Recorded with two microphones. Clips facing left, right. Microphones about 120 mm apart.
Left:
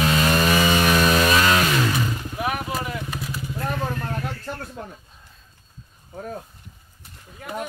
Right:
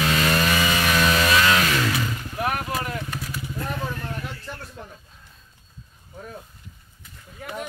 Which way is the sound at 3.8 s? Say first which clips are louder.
Left 3 dB; 45° left (ahead or behind).